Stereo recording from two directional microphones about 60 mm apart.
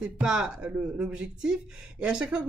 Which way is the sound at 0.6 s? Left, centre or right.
Right.